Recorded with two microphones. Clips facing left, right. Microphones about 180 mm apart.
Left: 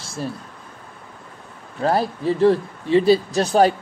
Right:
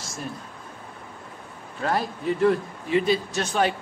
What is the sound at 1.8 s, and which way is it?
Speech, 35° left (ahead or behind).